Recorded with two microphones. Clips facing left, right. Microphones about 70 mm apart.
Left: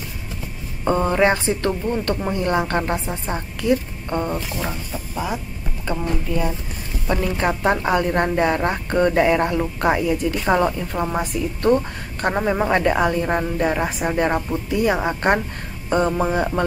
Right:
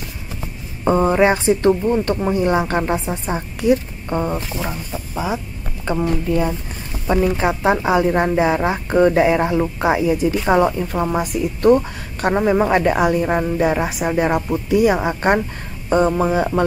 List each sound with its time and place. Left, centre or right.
0.8 s a woman's voice: centre
7.1 s a woman's voice: centre